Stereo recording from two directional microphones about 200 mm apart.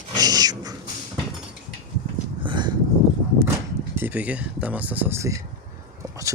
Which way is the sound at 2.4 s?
20° right (ahead or behind).